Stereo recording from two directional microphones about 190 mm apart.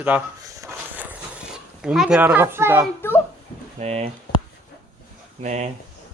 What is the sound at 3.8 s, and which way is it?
Speech, 35° right (ahead or behind).